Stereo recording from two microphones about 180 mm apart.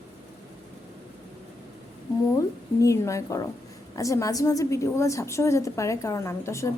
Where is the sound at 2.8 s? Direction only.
15° left (ahead or behind).